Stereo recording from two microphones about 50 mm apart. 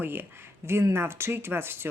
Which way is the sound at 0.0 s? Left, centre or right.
Right.